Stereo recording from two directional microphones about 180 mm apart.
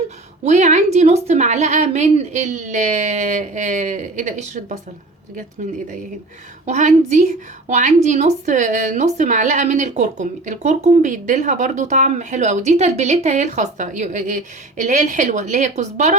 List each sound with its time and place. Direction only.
0.4 s a woman's voice: 40° right (ahead or behind)
6.7 s a woman's voice: 40° right (ahead or behind)